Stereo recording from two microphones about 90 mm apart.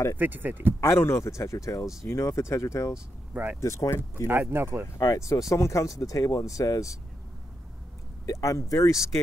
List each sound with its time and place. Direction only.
0.2 s speech: 20° right (ahead or behind)
0.7 s speech: 30° left (ahead or behind)
4.3 s speech: 25° right (ahead or behind)
4.9 s speech: 35° left (ahead or behind)
8.3 s speech: 35° left (ahead or behind)